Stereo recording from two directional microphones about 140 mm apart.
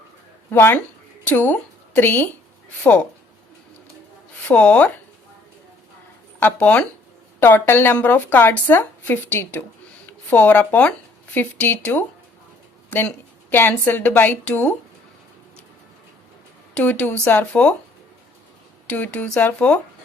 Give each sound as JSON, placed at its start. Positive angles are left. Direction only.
{"t": 0.5, "sound": "speech", "side_deg": 15}
{"t": 4.4, "sound": "speech", "side_deg": 10}
{"t": 6.4, "sound": "speech", "side_deg": 10}
{"t": 16.7, "sound": "speech", "side_deg": 10}
{"t": 18.9, "sound": "speech", "side_deg": 10}